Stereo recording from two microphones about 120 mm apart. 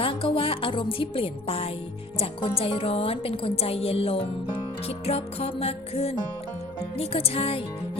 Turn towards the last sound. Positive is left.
turn(degrees=55)  # may be behind; listen again after turning